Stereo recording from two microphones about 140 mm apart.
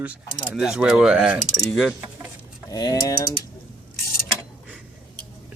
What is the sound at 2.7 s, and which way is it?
Mechanisms, 25° left (ahead or behind).